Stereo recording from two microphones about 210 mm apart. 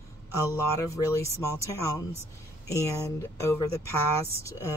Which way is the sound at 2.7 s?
15° left (ahead or behind).